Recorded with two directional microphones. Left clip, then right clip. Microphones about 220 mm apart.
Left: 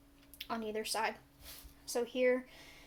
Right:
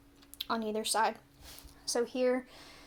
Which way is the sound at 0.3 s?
35° right (ahead or behind).